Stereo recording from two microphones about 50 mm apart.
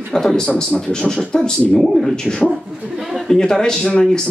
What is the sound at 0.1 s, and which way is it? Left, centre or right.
Speech, centre.